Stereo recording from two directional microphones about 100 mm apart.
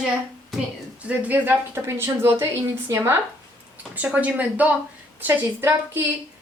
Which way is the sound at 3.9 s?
15° right (ahead or behind).